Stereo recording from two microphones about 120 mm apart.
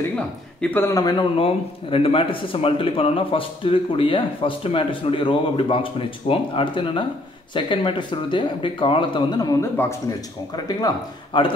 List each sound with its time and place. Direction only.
0.1 s speech: 10° left (ahead or behind)
0.8 s a man's voice: 30° left (ahead or behind)
1.4 s a man's voice: 50° left (ahead or behind)
9.6 s speech: 25° left (ahead or behind)
11.3 s a man's voice: 45° left (ahead or behind)